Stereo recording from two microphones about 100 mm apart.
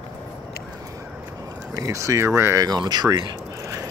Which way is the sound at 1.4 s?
35° right (ahead or behind).